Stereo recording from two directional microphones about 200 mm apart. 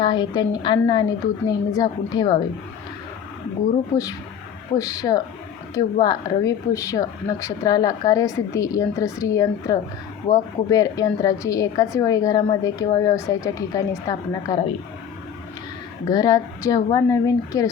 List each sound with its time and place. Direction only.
0.0 s a woman's voice: 20° left (ahead or behind)
3.9 s a woman's voice: 20° left (ahead or behind)
16.0 s a woman's voice: 20° left (ahead or behind)